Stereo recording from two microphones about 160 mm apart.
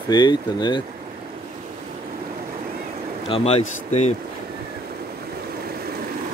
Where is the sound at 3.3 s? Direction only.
40° left (ahead or behind).